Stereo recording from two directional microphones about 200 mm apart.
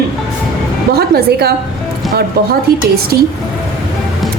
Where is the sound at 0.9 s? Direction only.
50° right (ahead or behind).